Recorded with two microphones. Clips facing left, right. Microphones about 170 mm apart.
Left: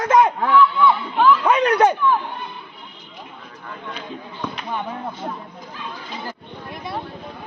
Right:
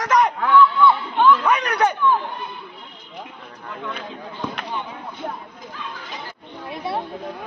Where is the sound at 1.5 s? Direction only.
30° left (ahead or behind).